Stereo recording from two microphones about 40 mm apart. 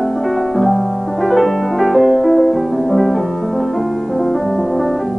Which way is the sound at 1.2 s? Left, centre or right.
Centre.